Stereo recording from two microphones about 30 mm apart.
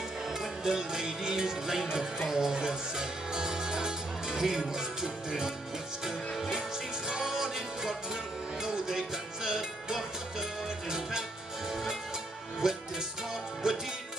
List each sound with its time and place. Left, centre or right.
0.3 s music: centre
2.5 s speech: right
7.1 s music: centre
11.7 s music: centre
12.6 s music: centre